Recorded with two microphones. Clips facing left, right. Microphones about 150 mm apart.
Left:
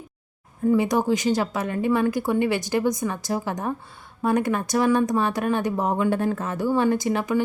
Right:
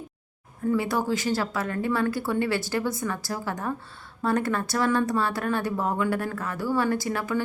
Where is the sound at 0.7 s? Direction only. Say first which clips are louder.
Left 4 dB; 20° left (ahead or behind).